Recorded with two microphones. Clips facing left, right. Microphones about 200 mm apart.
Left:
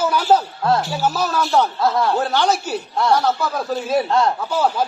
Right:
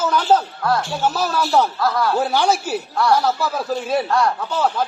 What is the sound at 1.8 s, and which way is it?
Speech, 25° left (ahead or behind).